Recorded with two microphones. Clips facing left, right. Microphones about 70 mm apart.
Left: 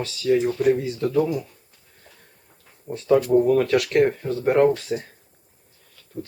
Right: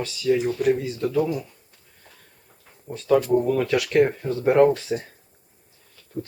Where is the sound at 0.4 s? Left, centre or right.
Centre.